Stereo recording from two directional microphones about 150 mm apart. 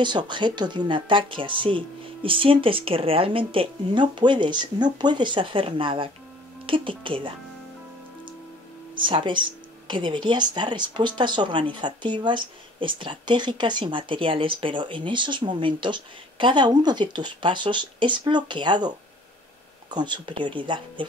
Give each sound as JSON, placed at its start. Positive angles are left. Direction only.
{"t": 0.0, "sound": "speech", "side_deg": -30}
{"t": 8.9, "sound": "speech", "side_deg": -30}